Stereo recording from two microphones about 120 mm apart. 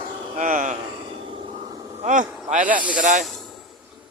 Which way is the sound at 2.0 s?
90° right.